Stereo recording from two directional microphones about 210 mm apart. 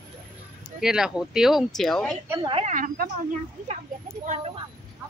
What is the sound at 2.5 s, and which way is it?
Speech, 35° right (ahead or behind).